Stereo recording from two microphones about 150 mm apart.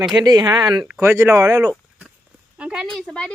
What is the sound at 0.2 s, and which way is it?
Speech, 25° right (ahead or behind).